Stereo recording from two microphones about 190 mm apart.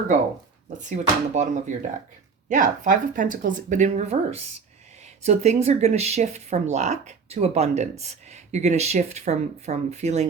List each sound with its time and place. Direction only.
0.9 s speech: 40° right (ahead or behind)